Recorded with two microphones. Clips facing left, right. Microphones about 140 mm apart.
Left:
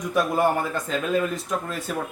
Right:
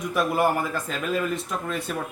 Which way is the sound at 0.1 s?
5° right (ahead or behind).